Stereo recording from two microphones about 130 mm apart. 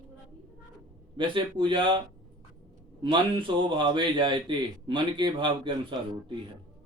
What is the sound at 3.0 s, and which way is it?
A man's voice, 40° right (ahead or behind).